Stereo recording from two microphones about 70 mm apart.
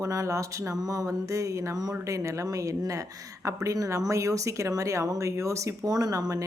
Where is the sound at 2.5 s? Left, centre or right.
Right.